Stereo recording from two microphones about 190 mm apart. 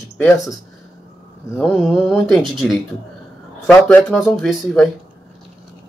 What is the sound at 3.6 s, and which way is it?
Speech, 15° left (ahead or behind).